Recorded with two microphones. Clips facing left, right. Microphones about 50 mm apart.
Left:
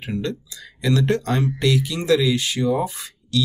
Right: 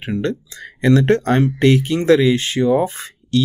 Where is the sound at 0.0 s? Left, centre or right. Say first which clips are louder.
Right 5 dB; right.